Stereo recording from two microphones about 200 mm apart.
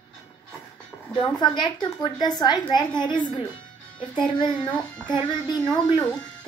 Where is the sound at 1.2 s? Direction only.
20° left (ahead or behind).